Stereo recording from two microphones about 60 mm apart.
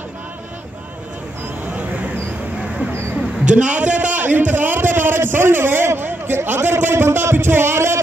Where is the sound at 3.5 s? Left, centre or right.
Right.